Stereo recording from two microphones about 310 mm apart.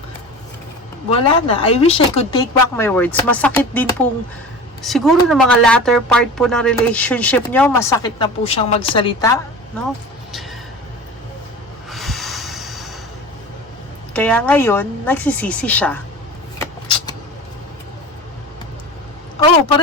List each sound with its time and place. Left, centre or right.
1.1 s a woman's voice: centre
11.9 s snort: centre
14.1 s speech: centre